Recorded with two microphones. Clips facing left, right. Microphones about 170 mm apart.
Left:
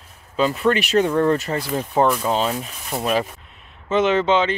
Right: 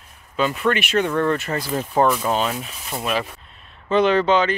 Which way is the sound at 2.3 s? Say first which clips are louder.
Left 1 dB; 30° left (ahead or behind).